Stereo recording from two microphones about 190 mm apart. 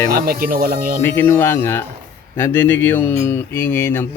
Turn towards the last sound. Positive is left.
turn(degrees=10)  # may be behind; listen again after turning